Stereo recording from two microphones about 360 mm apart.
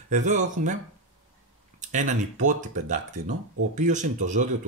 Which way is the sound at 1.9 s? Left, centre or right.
Right.